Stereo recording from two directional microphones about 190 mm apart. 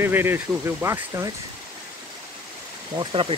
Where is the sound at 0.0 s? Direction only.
10° right (ahead or behind).